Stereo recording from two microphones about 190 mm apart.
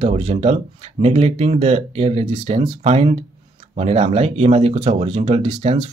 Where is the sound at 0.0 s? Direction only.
35° right (ahead or behind).